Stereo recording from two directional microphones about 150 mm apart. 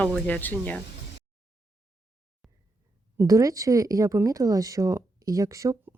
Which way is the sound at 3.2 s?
20° right (ahead or behind).